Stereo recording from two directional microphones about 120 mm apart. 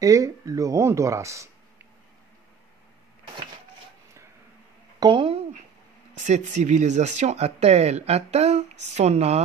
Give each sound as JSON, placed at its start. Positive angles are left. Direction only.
{"t": 0.0, "sound": "speech", "side_deg": -25}
{"t": 5.0, "sound": "a sound", "side_deg": -45}
{"t": 6.1, "sound": "speech", "side_deg": -80}